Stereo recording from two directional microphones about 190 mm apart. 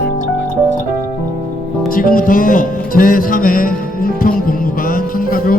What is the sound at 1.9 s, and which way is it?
Music, 50° left (ahead or behind).